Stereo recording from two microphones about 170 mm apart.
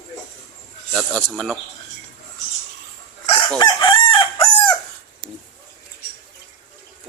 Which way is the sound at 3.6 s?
25° left (ahead or behind).